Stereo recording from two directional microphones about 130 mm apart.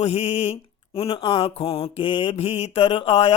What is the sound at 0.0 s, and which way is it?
Speech, 50° left (ahead or behind).